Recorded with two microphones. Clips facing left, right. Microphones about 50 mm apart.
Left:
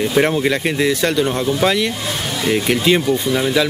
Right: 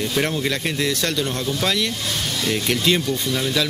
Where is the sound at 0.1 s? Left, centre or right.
Left.